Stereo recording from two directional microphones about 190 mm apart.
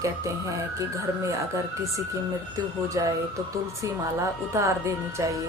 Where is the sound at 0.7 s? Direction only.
15° right (ahead or behind).